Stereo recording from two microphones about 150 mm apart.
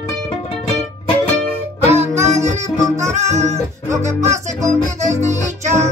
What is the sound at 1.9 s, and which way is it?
Music, 20° right (ahead or behind).